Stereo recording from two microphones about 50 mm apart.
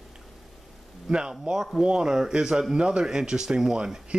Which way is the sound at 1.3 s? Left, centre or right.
Centre.